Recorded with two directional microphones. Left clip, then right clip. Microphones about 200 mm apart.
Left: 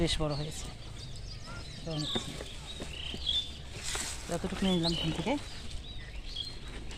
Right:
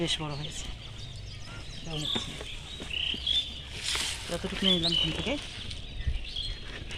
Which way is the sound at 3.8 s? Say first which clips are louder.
Right 7 dB; centre (ahead or behind).